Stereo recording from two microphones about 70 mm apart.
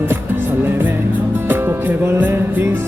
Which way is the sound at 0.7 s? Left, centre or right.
Right.